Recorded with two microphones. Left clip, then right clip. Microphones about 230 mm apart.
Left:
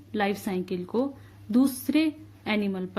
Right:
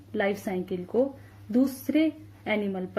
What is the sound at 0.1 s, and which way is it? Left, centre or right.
Speech, left.